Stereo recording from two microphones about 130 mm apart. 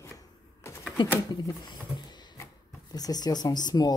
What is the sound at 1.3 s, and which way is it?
Speech, 30° left (ahead or behind).